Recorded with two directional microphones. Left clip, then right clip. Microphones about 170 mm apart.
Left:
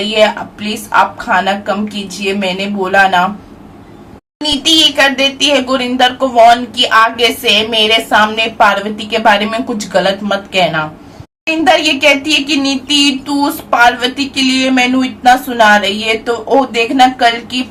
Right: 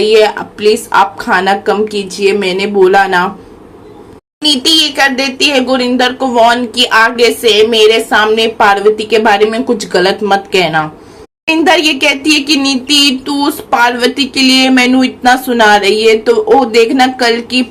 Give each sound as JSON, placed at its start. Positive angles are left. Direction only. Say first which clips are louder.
{"t": 0.9, "sound": "speech", "louder": "right 2 dB", "side_deg": -30}
{"t": 4.4, "sound": "speech", "louder": "right 1 dB", "side_deg": -25}